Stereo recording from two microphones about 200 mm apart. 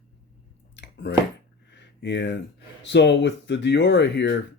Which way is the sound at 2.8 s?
60° left (ahead or behind).